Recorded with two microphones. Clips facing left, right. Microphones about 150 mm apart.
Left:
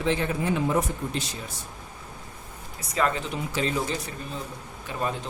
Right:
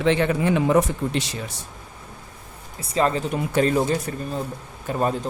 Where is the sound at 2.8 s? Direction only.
30° right (ahead or behind).